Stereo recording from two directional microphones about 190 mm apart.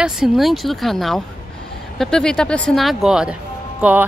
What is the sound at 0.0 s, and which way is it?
A woman's voice, centre (ahead or behind).